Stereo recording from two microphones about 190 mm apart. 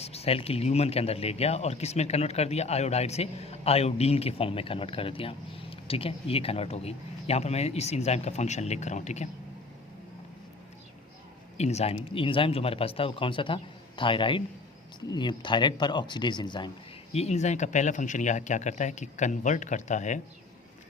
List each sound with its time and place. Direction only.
0.0 s speech: 35° left (ahead or behind)
11.5 s speech: 35° left (ahead or behind)